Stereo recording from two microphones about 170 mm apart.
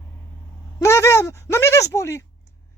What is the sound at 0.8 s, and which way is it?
Speech, 15° left (ahead or behind).